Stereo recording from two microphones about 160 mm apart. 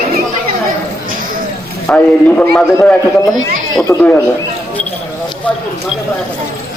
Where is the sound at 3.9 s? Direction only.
20° left (ahead or behind).